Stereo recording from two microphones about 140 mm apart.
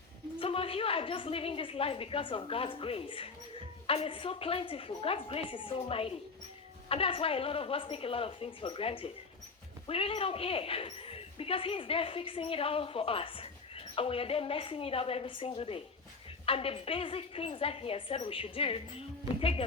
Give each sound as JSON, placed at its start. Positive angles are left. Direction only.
{"t": 0.3, "sound": "speech", "side_deg": 40}